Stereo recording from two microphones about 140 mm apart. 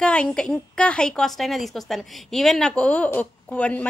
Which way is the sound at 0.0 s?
5° left (ahead or behind).